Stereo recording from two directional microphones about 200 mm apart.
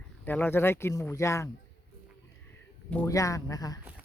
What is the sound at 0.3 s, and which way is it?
Speech, 10° left (ahead or behind).